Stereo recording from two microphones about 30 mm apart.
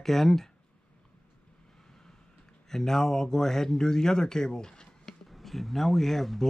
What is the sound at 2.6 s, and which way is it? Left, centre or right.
Speech, centre.